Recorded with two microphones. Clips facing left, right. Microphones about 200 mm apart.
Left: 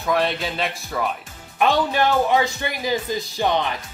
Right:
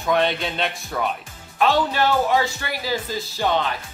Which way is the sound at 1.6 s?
15° left (ahead or behind).